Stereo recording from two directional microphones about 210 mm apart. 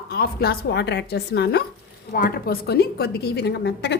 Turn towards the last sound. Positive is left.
turn(degrees=55)  # may be behind; listen again after turning